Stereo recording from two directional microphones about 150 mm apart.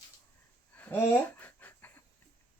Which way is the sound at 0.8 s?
15° left (ahead or behind).